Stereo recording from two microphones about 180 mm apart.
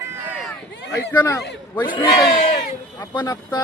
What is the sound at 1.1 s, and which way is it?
Speech, 15° left (ahead or behind).